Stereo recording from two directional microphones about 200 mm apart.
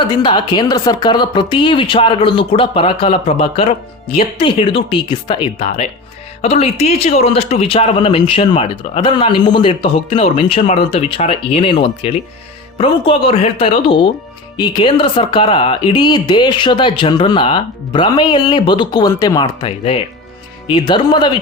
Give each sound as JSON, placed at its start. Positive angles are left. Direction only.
{"t": 0.2, "sound": "speech", "side_deg": 25}